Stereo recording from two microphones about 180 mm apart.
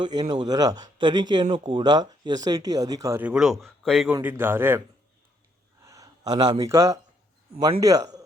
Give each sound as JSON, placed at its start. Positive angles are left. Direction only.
{"t": 0.0, "sound": "speech", "side_deg": -20}
{"t": 4.2, "sound": "a man's voice", "side_deg": -10}
{"t": 5.8, "sound": "speech", "side_deg": -20}